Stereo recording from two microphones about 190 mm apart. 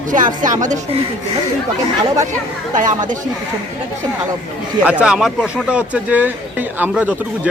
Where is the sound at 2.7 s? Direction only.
45° right (ahead or behind).